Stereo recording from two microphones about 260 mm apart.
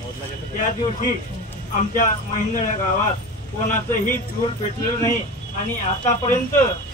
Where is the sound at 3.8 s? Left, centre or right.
Centre.